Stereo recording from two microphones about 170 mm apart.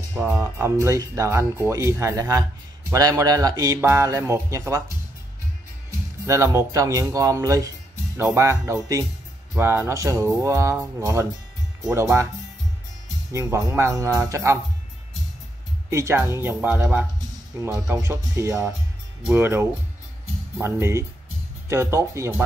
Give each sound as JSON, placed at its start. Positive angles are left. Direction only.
{"t": 0.1, "sound": "speech", "side_deg": -15}
{"t": 13.3, "sound": "speech", "side_deg": -15}
{"t": 15.9, "sound": "speech", "side_deg": -15}